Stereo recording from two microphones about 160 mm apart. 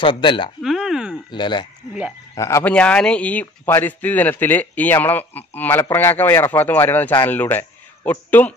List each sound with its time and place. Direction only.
0.0 s speech: 30° left (ahead or behind)
0.6 s a sound: centre (ahead or behind)
1.3 s speech: 30° left (ahead or behind)
2.7 s speech: 5° left (ahead or behind)